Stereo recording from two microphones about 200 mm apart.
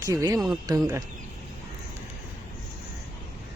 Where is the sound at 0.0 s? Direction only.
15° right (ahead or behind).